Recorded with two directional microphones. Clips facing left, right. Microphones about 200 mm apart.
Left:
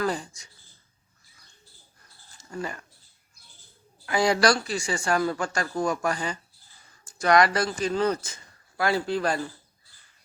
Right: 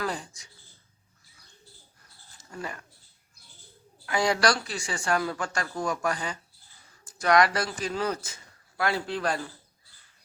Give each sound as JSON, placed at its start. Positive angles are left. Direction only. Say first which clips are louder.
{"t": 0.0, "sound": "speech", "louder": "left 4 dB", "side_deg": 0}
{"t": 2.4, "sound": "speech", "louder": "left 4 dB", "side_deg": 0}
{"t": 4.0, "sound": "speech", "louder": "left 3 dB", "side_deg": 0}